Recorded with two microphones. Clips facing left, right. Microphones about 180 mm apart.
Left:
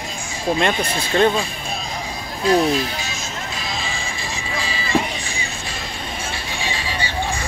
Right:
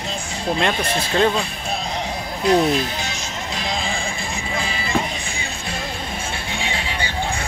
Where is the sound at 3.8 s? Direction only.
55° right (ahead or behind).